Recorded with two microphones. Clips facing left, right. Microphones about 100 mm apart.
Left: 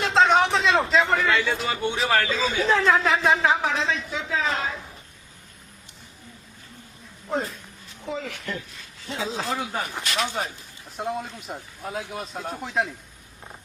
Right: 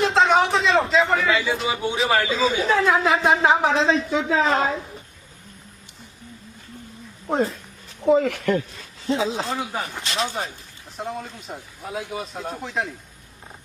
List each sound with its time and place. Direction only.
0.0 s a man's voice: centre (ahead or behind)
3.2 s speech: 25° right (ahead or behind)
3.6 s a woman's voice: 35° right (ahead or behind)
8.0 s speech: 55° right (ahead or behind)
9.0 s speech: 20° right (ahead or behind)
9.5 s a man's voice: centre (ahead or behind)
10.0 s speech: 25° right (ahead or behind)
10.9 s a man's voice: centre (ahead or behind)